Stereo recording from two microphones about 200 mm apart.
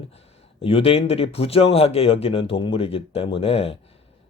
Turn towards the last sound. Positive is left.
turn(degrees=30)  # may be behind; listen again after turning